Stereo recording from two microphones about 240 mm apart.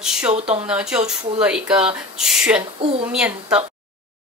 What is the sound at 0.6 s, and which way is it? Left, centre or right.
A woman's voice, centre.